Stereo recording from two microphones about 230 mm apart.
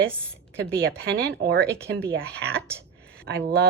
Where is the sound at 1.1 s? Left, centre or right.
Right.